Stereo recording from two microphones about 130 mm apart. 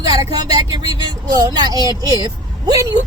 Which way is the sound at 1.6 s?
30° right (ahead or behind).